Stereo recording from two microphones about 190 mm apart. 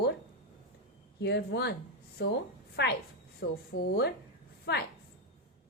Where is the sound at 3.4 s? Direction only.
55° left (ahead or behind).